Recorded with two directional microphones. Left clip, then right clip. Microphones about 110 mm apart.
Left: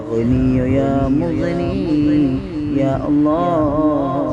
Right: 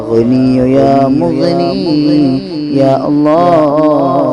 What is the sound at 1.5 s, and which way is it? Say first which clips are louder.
Mantra: right 8 dB; 50° right (ahead or behind).